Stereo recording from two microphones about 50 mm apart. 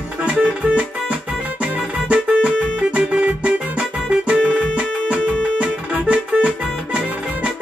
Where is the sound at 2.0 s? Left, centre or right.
Centre.